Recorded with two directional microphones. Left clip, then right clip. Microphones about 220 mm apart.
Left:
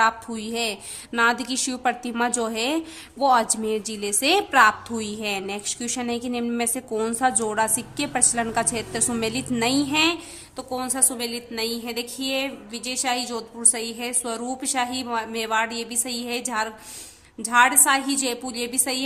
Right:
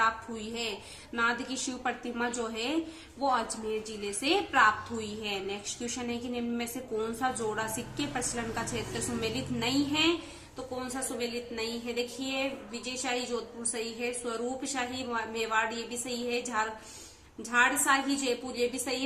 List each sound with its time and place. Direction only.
0.0 s a woman's voice: 45° left (ahead or behind)